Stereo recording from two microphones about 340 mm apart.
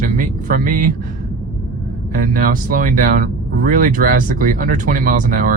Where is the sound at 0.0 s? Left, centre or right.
Right.